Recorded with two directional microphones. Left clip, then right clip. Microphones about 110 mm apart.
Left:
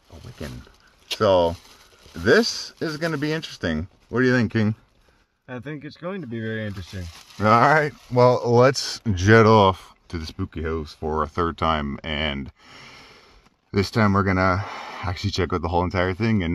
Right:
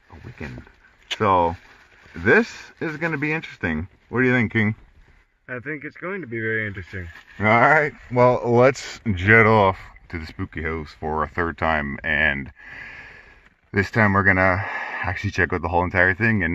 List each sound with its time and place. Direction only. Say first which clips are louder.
1.2 s speech: even; 80° right
2.2 s speech: even; 65° right (ahead or behind)
4.3 s speech: right 2 dB; 30° right (ahead or behind)
5.5 s speech: right 4 dB; 25° left (ahead or behind)
7.3 s speech: right 1 dB; 15° right (ahead or behind)
9.3 s speech: even; 50° left (ahead or behind)
9.8 s speech: right 1 dB; 25° left (ahead or behind)